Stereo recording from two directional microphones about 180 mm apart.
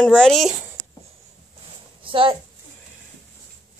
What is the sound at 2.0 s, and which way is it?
Speech, 30° right (ahead or behind).